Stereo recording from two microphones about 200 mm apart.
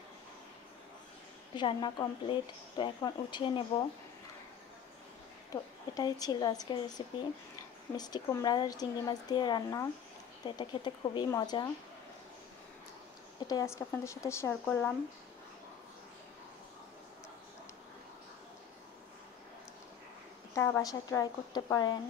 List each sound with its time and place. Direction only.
1.5 s speech: 20° left (ahead or behind)
5.5 s speech: 20° left (ahead or behind)
13.5 s a woman's voice: 15° left (ahead or behind)
20.5 s a woman's voice: 15° left (ahead or behind)